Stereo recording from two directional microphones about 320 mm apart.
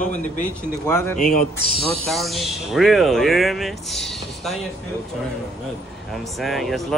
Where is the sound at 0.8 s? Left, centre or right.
Centre.